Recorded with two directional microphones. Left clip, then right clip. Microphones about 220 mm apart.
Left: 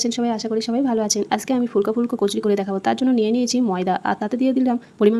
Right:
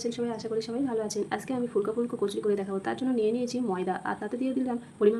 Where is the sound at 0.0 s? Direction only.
45° left (ahead or behind).